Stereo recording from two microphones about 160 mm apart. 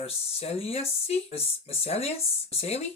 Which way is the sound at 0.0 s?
40° left (ahead or behind).